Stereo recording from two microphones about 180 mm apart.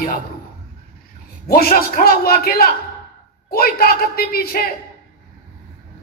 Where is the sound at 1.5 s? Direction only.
55° left (ahead or behind).